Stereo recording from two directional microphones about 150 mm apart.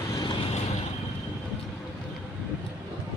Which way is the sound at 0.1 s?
30° left (ahead or behind).